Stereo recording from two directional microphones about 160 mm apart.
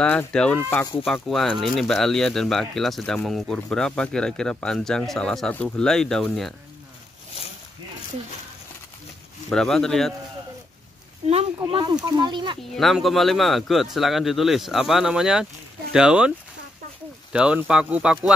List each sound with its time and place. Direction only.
0.0 s speech: 10° left (ahead or behind)
1.0 s speech: centre (ahead or behind)
7.4 s a sound: 40° left (ahead or behind)
9.5 s speech: 5° left (ahead or behind)
11.6 s speech: 30° right (ahead or behind)
12.7 s speech: centre (ahead or behind)